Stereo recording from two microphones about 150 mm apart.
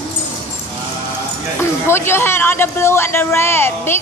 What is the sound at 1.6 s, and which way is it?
Speech, 15° left (ahead or behind).